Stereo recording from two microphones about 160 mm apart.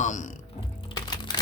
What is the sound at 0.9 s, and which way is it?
Music, 25° left (ahead or behind).